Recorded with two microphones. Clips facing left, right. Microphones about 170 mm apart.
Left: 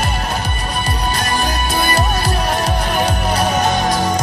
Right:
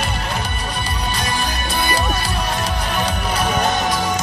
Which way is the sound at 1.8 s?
50° left (ahead or behind).